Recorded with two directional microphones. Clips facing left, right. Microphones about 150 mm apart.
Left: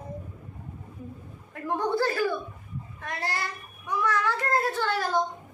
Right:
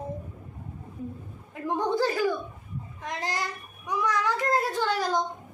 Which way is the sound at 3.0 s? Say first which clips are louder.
Right 1 dB; 15° right (ahead or behind).